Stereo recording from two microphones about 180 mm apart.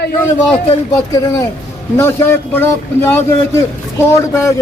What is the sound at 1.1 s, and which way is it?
A man's voice, 20° left (ahead or behind).